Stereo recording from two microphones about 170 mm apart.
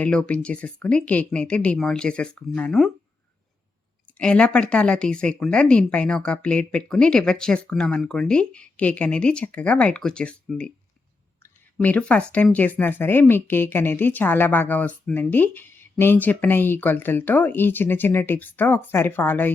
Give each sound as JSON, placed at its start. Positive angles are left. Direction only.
{"t": 0.0, "sound": "speech", "side_deg": 5}
{"t": 4.2, "sound": "speech", "side_deg": 5}